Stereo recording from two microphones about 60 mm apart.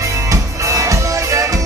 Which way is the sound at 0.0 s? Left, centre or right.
Right.